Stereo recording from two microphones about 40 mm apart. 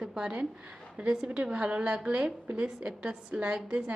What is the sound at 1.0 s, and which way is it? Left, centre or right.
A woman's voice, right.